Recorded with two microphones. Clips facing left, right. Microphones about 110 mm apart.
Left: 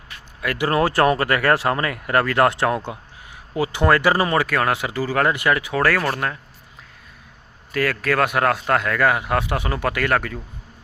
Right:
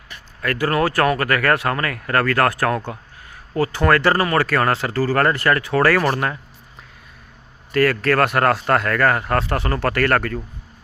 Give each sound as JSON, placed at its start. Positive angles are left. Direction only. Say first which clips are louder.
{"t": 0.4, "sound": "speech", "louder": "right 1 dB", "side_deg": 10}
{"t": 0.7, "sound": "speech", "louder": "left 1 dB", "side_deg": 25}
{"t": 7.7, "sound": "speech", "louder": "right 4 dB", "side_deg": 0}